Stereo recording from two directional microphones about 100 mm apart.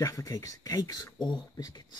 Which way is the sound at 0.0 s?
35° left (ahead or behind).